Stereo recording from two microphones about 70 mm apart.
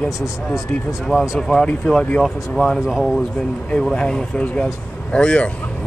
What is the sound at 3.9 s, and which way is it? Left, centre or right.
Speech, centre.